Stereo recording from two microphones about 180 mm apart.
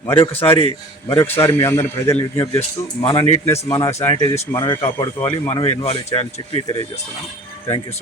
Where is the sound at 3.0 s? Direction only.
35° left (ahead or behind).